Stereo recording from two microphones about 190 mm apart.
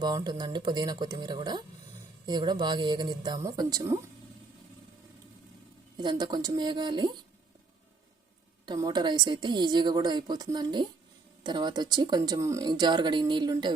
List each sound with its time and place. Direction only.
0.0 s speech: 20° right (ahead or behind)
6.0 s speech: 25° right (ahead or behind)
8.6 s speech: 20° right (ahead or behind)